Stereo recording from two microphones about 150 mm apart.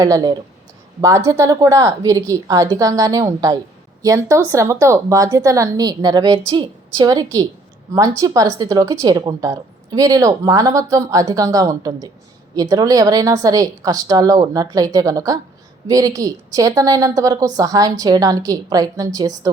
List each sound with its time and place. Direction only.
0.0 s a woman's voice: 25° right (ahead or behind)